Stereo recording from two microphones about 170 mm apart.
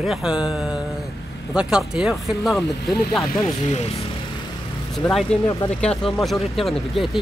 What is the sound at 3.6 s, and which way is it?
Speech, 40° left (ahead or behind).